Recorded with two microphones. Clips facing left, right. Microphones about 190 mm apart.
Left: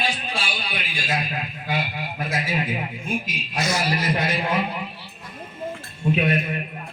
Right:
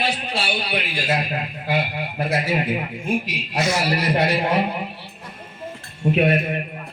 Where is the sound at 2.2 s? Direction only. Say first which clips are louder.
Right 4 dB; 60° right (ahead or behind).